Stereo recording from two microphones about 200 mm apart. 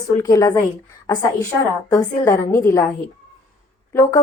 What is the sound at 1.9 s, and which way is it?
A woman's voice, 15° left (ahead or behind).